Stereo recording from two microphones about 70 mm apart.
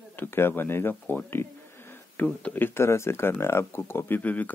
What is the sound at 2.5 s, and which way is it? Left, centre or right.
Speech, left.